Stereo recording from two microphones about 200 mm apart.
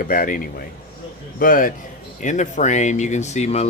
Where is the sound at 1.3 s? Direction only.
45° left (ahead or behind).